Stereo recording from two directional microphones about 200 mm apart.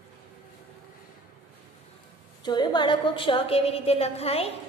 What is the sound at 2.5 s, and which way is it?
A woman's voice, 20° left (ahead or behind).